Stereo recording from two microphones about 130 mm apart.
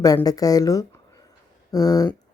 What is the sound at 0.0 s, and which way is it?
Speech, 30° left (ahead or behind).